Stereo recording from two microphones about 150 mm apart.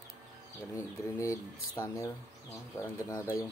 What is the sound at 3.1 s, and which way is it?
Speech, 20° left (ahead or behind).